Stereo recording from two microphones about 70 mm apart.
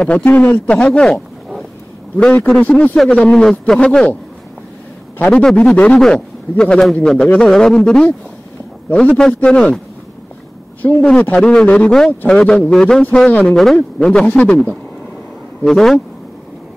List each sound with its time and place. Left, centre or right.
0.0 s speech: left
2.3 s a man's voice: left
5.2 s speech: centre
9.2 s speech: centre
10.8 s a man's voice: left
13.6 s a man's voice: centre